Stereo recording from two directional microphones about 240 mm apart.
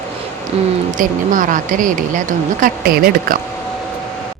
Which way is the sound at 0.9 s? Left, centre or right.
Right.